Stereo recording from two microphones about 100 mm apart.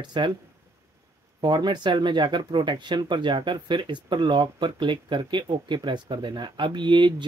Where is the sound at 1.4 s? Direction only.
50° right (ahead or behind).